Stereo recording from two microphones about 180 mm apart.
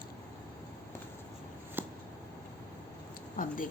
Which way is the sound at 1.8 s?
10° right (ahead or behind).